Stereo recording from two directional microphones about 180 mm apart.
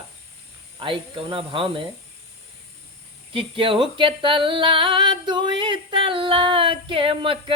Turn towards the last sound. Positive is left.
turn(degrees=-30)  # may be behind; listen again after turning